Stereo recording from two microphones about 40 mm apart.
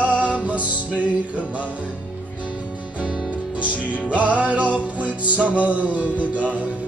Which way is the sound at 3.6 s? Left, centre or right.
Right.